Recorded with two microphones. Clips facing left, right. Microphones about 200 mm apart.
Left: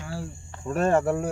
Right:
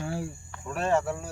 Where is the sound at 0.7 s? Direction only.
45° left (ahead or behind).